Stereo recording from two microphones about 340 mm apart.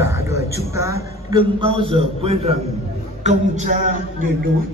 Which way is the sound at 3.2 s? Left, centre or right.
Right.